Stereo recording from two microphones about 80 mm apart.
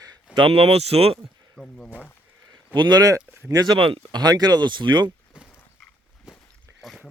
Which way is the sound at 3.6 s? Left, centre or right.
Right.